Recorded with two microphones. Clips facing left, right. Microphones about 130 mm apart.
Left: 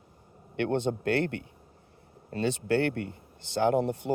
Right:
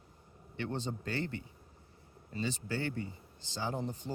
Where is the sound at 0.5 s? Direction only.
65° left (ahead or behind).